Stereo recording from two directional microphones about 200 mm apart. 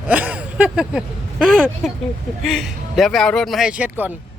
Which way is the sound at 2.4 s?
Centre (ahead or behind).